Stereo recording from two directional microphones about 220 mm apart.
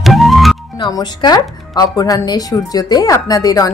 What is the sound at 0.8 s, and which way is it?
Speech, 20° left (ahead or behind).